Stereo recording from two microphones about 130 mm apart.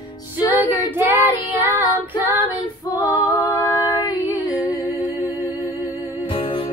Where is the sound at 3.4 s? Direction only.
30° left (ahead or behind).